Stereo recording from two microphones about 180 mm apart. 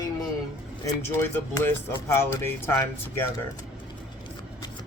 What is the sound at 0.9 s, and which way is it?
Speech, 15° left (ahead or behind).